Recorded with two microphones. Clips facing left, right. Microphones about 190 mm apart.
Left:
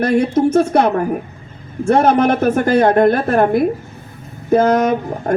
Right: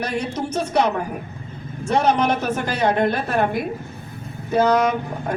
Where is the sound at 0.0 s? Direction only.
50° left (ahead or behind).